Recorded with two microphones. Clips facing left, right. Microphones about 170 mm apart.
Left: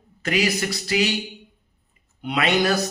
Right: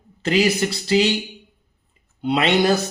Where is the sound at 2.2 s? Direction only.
30° right (ahead or behind).